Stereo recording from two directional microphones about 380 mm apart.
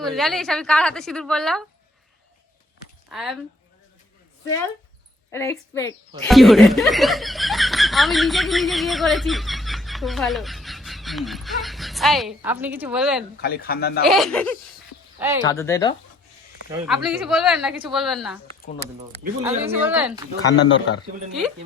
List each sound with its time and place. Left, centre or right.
0.0 s a woman's voice: centre
3.1 s speech: centre
5.3 s speech: centre
13.3 s speech: left
14.0 s a woman's voice: centre
16.7 s a woman's voice: centre
18.6 s speech: left
19.6 s a woman's voice: centre
20.5 s speech: left